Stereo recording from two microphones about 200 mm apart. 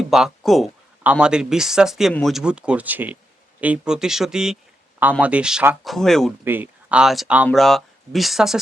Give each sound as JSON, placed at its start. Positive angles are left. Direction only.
{"t": 0.0, "sound": "speech", "side_deg": 0}
{"t": 6.4, "sound": "speech", "side_deg": -10}